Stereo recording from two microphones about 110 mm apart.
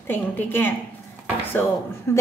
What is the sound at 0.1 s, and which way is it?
Speech, 20° left (ahead or behind).